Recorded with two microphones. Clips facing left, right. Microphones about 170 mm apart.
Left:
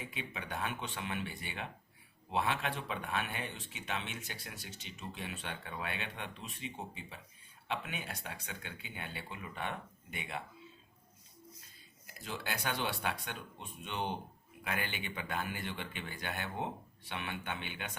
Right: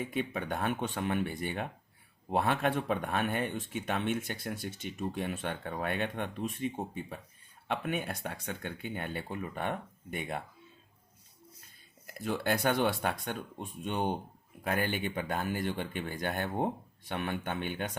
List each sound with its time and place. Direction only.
0.0 s speech: 50° right (ahead or behind)
12.0 s speech: 55° right (ahead or behind)